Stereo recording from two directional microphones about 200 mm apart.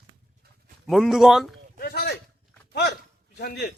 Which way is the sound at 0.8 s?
Centre (ahead or behind).